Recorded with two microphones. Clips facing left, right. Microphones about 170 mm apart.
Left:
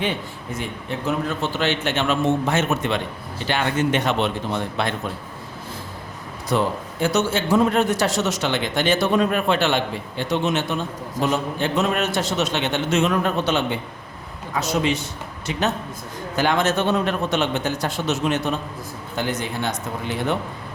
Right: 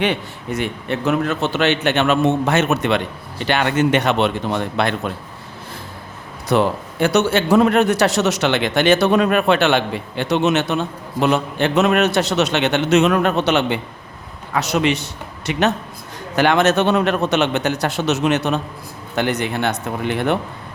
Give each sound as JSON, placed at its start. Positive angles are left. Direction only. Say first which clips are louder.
{"t": 0.0, "sound": "a man's voice", "louder": "right 5 dB", "side_deg": -75}
{"t": 6.5, "sound": "a man's voice", "louder": "right 5 dB", "side_deg": -70}